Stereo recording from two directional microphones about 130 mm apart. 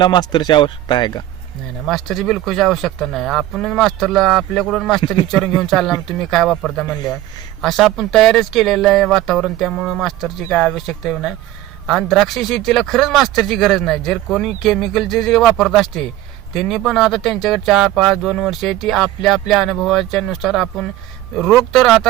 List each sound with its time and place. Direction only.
0.0 s speech: 35° left (ahead or behind)
1.9 s speech: centre (ahead or behind)